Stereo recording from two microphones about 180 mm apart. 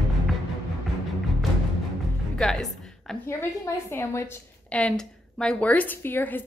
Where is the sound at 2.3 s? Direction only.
Centre (ahead or behind).